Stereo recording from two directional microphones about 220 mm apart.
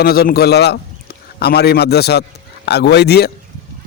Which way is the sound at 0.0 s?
45° left (ahead or behind).